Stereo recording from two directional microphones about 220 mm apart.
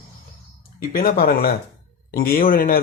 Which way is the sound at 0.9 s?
40° left (ahead or behind).